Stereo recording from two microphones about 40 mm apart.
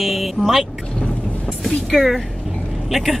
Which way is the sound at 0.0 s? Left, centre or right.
Centre.